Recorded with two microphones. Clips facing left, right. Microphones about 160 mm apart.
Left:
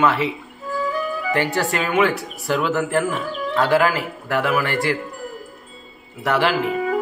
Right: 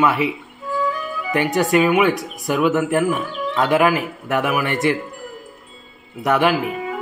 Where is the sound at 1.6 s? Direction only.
15° right (ahead or behind).